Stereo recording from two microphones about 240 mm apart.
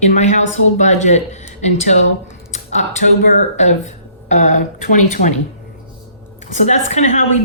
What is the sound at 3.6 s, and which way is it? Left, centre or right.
A woman's voice, left.